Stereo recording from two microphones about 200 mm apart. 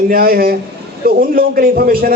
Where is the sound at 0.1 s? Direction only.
45° right (ahead or behind).